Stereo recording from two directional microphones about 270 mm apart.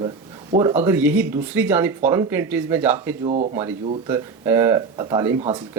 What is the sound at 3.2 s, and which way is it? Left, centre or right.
Speech, right.